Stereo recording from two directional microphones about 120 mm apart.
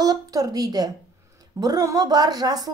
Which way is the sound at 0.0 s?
30° right (ahead or behind).